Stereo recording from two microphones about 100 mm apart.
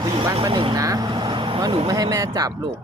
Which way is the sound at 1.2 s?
60° right (ahead or behind).